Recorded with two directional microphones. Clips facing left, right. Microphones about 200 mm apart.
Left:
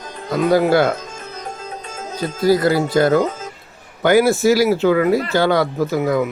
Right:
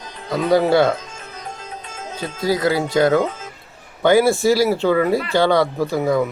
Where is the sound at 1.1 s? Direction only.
40° left (ahead or behind).